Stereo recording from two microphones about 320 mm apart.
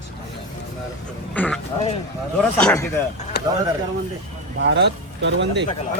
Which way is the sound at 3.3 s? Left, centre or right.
Left.